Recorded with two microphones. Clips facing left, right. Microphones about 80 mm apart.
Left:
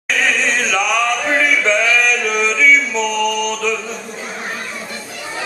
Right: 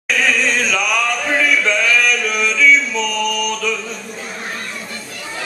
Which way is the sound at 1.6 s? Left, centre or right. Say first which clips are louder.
Left 1 dB; left.